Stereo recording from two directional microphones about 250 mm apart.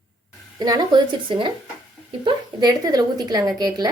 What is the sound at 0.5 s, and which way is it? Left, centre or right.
Speech, centre.